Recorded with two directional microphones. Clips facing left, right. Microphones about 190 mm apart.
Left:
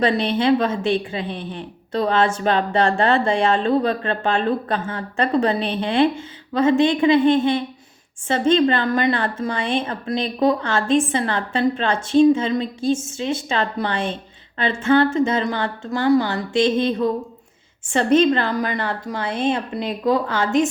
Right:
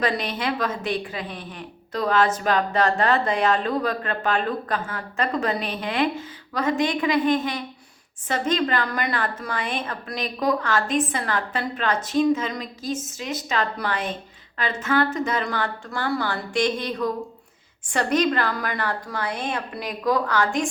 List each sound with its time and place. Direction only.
0.0 s a woman's voice: 25° left (ahead or behind)